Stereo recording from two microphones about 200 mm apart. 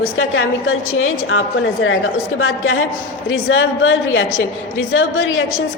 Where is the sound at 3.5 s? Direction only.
80° left.